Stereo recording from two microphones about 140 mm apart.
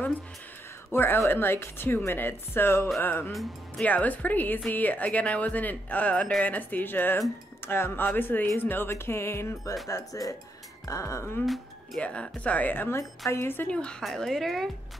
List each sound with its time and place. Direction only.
0.9 s speech: 15° left (ahead or behind)
3.3 s speech: 5° left (ahead or behind); by 11.4 s 20° left (ahead or behind)
11.4 s speech: centre (ahead or behind)